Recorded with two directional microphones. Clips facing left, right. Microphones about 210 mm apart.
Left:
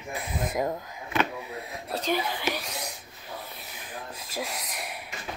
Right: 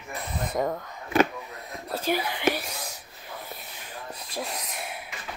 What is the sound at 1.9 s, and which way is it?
Speech, 5° right (ahead or behind).